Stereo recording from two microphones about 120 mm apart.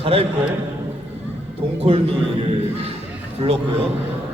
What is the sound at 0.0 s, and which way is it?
Speech, 55° right (ahead or behind).